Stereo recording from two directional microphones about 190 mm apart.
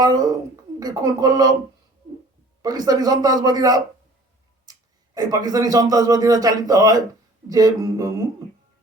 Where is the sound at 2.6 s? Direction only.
20° right (ahead or behind).